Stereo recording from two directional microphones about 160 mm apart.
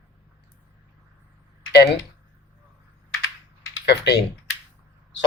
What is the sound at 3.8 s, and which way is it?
Speech, 90° left.